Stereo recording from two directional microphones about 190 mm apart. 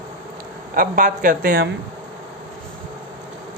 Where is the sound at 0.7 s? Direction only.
45° right (ahead or behind).